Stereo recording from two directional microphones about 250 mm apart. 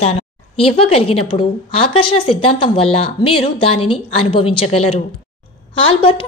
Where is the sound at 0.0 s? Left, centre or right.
Left.